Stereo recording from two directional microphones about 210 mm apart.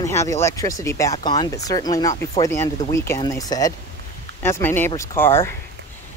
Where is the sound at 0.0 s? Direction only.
15° left (ahead or behind).